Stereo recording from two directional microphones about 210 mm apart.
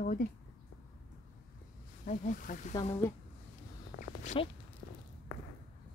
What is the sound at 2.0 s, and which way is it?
Speech, 40° left (ahead or behind).